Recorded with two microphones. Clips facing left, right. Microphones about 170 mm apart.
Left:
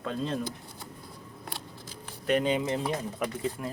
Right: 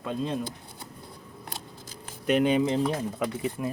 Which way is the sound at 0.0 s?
15° right (ahead or behind).